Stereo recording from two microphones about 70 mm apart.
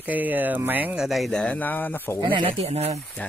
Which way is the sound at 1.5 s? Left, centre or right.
Left.